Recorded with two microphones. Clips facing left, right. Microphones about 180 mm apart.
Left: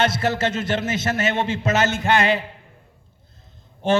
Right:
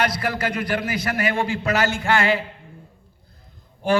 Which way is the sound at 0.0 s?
25° left (ahead or behind).